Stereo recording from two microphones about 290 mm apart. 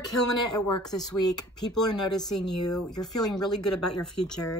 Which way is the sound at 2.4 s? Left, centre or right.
Left.